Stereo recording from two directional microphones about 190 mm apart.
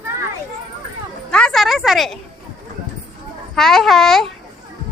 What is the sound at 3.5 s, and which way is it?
Speech, centre (ahead or behind).